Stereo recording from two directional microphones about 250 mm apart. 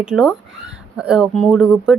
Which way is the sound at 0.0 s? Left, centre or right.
Centre.